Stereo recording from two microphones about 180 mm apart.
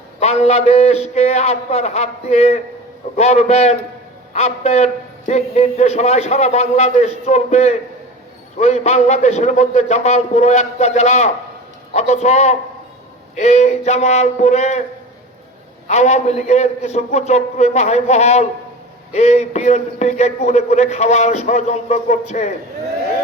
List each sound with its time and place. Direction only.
0.2 s a man's voice: 35° left (ahead or behind)
15.9 s a man's voice: 40° left (ahead or behind)